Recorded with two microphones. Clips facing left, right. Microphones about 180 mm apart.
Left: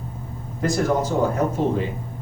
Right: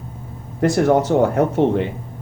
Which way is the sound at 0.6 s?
65° right (ahead or behind).